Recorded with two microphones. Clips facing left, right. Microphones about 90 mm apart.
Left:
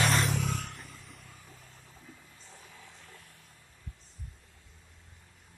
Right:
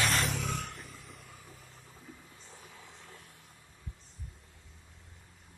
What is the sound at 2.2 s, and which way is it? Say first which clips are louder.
Vehicle: right 1 dB; 15° right (ahead or behind).